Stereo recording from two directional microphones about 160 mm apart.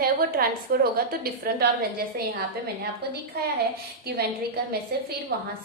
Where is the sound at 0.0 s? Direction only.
70° right (ahead or behind).